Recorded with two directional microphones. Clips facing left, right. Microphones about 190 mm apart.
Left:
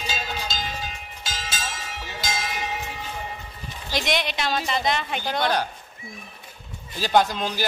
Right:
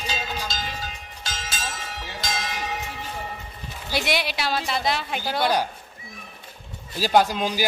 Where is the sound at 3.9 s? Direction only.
5° right (ahead or behind).